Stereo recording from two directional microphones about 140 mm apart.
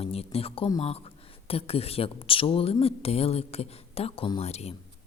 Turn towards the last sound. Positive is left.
turn(degrees=50)  # may be behind; listen again after turning